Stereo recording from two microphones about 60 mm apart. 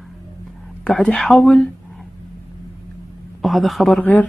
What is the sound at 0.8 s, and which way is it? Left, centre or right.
Speech, centre.